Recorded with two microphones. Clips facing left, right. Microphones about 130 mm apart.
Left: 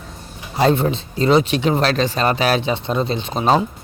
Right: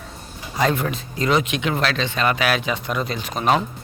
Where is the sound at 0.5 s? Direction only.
30° left (ahead or behind).